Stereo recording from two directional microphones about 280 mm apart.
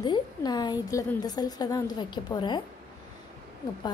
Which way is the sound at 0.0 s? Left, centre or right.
Centre.